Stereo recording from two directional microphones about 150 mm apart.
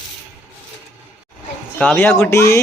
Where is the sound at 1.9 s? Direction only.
15° left (ahead or behind).